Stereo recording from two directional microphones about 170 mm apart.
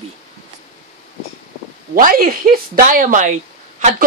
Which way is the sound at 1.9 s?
55° right (ahead or behind).